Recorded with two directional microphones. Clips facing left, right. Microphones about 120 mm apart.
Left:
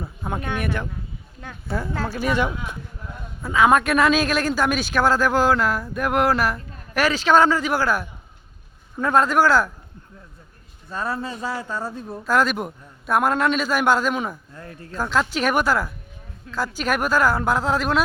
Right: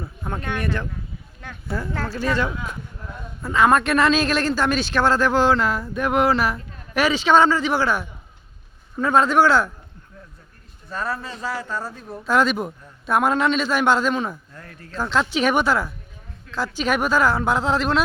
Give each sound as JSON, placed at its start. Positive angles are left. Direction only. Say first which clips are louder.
{"t": 0.0, "sound": "speech", "louder": "left 1 dB", "side_deg": 10}
{"t": 1.9, "sound": "speech", "louder": "even", "side_deg": 10}
{"t": 3.4, "sound": "speech", "louder": "even", "side_deg": 0}
{"t": 10.9, "sound": "a man's voice", "louder": "left 1 dB", "side_deg": 20}
{"t": 12.2, "sound": "speech", "louder": "right 1 dB", "side_deg": 0}
{"t": 14.5, "sound": "a man's voice", "louder": "left 3 dB", "side_deg": 25}
{"t": 14.9, "sound": "speech", "louder": "right 1 dB", "side_deg": 5}